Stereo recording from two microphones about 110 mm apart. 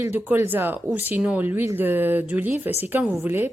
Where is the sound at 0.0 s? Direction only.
20° right (ahead or behind).